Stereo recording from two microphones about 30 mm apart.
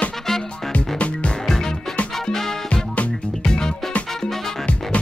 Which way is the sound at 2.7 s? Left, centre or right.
Left.